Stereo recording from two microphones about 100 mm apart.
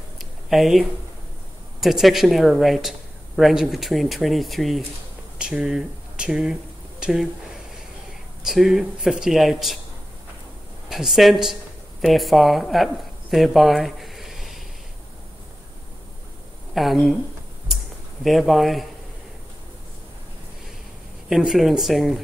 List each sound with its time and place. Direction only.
0.2 s a sound: centre (ahead or behind)
1.8 s a man's voice: centre (ahead or behind)
10.9 s a man's voice: centre (ahead or behind)
16.7 s a man's voice: centre (ahead or behind)
18.2 s a man's voice: centre (ahead or behind)
21.3 s a man's voice: 5° right (ahead or behind)